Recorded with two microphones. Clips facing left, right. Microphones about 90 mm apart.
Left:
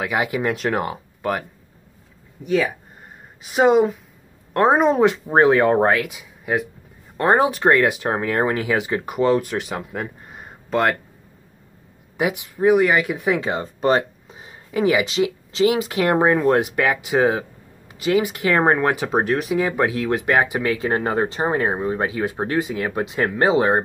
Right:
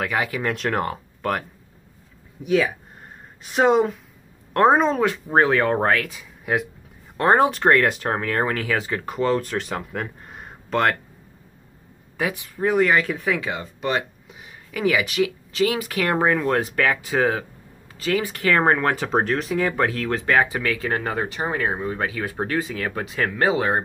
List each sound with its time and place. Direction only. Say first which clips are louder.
0.1 s speech: left 3 dB; 20° left (ahead or behind)
2.4 s speech: even; 5° right (ahead or behind)
4.8 s speech: left 5 dB; 20° left (ahead or behind)
6.4 s speech: left 1 dB; centre (ahead or behind)
12.2 s speech: left 4 dB; 20° left (ahead or behind)